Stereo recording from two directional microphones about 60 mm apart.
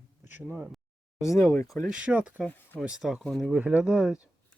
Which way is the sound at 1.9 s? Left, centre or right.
Centre.